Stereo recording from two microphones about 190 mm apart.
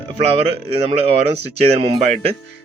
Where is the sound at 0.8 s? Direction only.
30° right (ahead or behind).